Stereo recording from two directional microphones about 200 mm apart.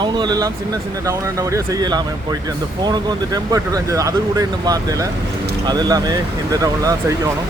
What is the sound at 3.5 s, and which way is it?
Speech, 15° right (ahead or behind).